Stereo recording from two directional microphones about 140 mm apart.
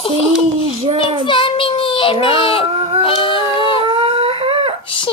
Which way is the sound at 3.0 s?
40° left (ahead or behind).